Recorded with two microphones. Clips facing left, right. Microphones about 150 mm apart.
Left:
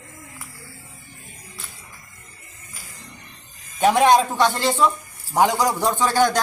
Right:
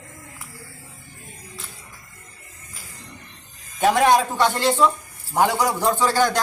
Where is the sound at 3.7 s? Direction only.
15° left (ahead or behind).